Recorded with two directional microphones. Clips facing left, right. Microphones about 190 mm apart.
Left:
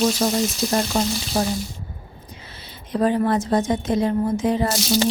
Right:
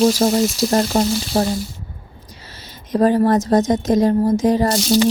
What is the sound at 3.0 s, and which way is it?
Speech, 45° right (ahead or behind).